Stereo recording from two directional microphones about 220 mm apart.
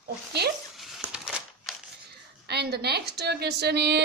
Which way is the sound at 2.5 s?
50° right (ahead or behind).